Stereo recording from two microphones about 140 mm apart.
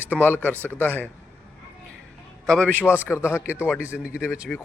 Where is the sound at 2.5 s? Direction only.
5° left (ahead or behind).